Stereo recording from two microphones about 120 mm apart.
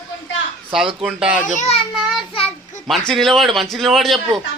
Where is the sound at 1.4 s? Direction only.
80° left; by 1.9 s 60° left (ahead or behind).